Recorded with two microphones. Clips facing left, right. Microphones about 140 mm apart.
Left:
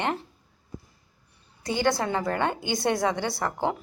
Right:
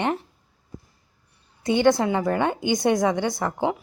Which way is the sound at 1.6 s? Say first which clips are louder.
Right 6 dB; 20° right (ahead or behind).